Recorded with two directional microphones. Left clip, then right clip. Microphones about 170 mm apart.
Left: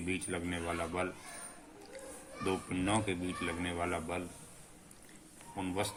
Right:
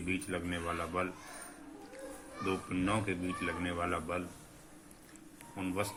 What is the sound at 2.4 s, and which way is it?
A man's voice, 25° left (ahead or behind).